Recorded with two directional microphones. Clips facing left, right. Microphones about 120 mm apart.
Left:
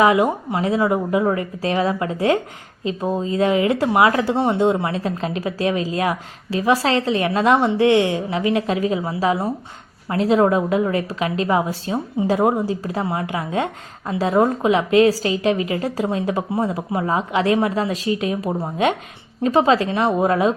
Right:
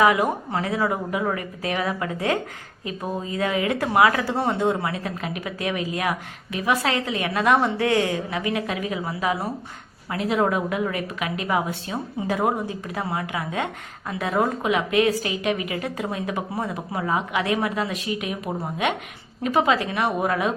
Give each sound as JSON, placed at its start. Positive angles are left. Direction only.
{"t": 0.0, "sound": "a woman's voice", "side_deg": 25}